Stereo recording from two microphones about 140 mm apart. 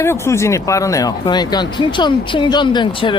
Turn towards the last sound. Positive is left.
turn(degrees=35)  # may be behind; listen again after turning